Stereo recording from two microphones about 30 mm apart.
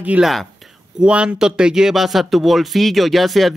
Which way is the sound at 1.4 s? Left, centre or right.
Right.